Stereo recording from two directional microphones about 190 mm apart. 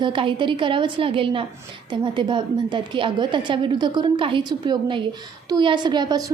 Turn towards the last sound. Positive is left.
turn(degrees=-20)  # may be behind; listen again after turning